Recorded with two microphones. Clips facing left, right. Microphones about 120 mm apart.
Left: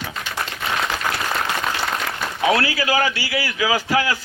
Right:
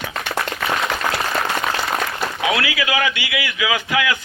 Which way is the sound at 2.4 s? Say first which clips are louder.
Left 3 dB; 35° left (ahead or behind).